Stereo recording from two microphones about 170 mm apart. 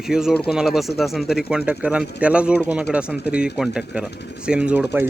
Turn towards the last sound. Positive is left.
turn(degrees=-10)  # may be behind; listen again after turning